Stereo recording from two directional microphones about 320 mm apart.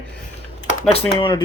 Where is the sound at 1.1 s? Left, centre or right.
Centre.